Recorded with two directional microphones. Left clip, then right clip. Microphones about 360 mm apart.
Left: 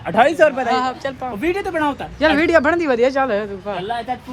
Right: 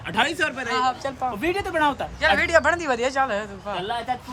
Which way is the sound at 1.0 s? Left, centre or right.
Centre.